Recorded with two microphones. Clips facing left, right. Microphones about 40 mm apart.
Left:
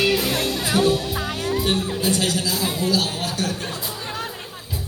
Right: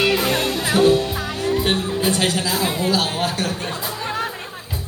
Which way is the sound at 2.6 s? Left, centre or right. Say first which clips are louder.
Right 1 dB; right.